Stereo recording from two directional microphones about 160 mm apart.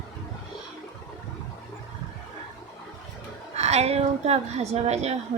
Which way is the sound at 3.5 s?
45° right (ahead or behind).